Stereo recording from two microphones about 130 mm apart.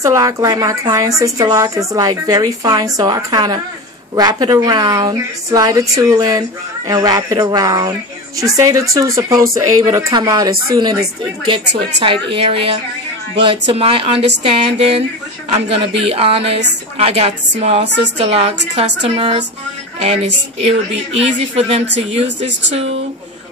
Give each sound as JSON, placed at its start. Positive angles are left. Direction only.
{"t": 0.0, "sound": "a woman's voice", "side_deg": -25}
{"t": 20.6, "sound": "a woman's voice", "side_deg": -50}